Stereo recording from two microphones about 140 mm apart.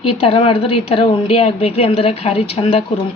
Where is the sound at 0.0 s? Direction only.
40° left (ahead or behind).